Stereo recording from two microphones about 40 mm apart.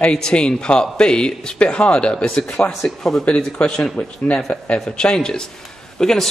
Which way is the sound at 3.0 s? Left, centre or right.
Centre.